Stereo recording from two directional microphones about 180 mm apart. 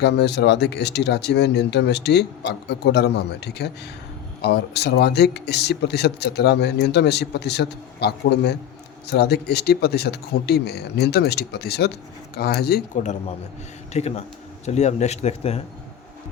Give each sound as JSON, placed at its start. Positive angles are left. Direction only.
{"t": 0.0, "sound": "speech", "side_deg": 70}
{"t": 13.9, "sound": "speech", "side_deg": 35}